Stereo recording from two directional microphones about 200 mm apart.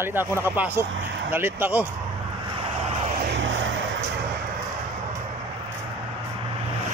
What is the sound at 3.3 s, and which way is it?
Vehicle, 70° right (ahead or behind).